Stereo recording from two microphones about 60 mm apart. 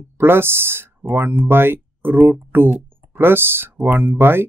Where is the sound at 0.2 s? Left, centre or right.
Right.